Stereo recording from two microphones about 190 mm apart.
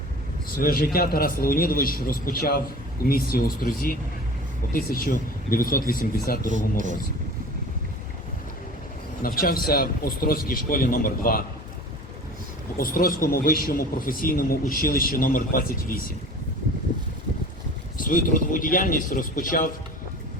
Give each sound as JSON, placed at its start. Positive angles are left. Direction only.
{"t": 0.5, "sound": "a man's voice", "side_deg": 50}
{"t": 6.5, "sound": "speech", "side_deg": -40}
{"t": 9.2, "sound": "a man's voice", "side_deg": 50}
{"t": 12.7, "sound": "a man's voice", "side_deg": 50}
{"t": 17.9, "sound": "a man's voice", "side_deg": 45}